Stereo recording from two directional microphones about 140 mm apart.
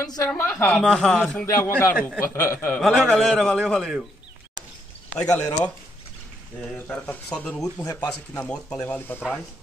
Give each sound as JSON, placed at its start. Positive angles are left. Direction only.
{"t": 0.0, "sound": "a man's voice", "side_deg": 25}
{"t": 0.9, "sound": "a man's voice", "side_deg": 0}
{"t": 1.4, "sound": "a man's voice", "side_deg": 15}
{"t": 2.8, "sound": "a man's voice", "side_deg": 0}
{"t": 5.1, "sound": "speech", "side_deg": 5}
{"t": 6.6, "sound": "speech", "side_deg": 10}
{"t": 7.8, "sound": "a man's voice", "side_deg": 25}
{"t": 8.5, "sound": "speech", "side_deg": 5}